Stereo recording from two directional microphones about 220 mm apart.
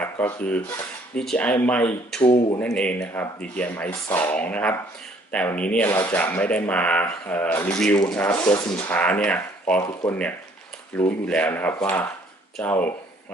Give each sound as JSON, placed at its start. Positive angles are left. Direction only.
{"t": 0.0, "sound": "speech", "side_deg": 5}
{"t": 2.2, "sound": "speech", "side_deg": 25}
{"t": 2.6, "sound": "speech", "side_deg": 5}
{"t": 9.8, "sound": "speech", "side_deg": 20}
{"t": 10.9, "sound": "speech", "side_deg": 5}